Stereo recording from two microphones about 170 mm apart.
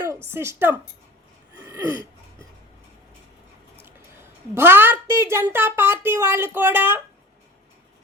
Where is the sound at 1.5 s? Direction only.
20° right (ahead or behind).